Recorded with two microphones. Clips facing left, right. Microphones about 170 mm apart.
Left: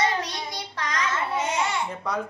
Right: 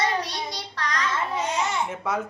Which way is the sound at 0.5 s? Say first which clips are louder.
Right 1 dB; 20° left (ahead or behind).